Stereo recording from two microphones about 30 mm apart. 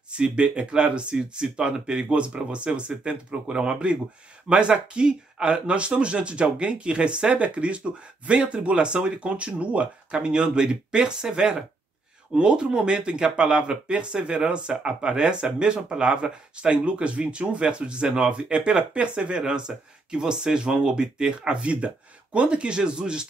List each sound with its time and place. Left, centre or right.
0.1 s speech: right
1.1 s speech: right
10.2 s speech: right